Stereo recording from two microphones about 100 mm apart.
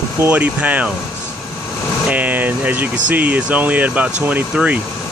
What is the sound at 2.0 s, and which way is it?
Speech, 15° right (ahead or behind).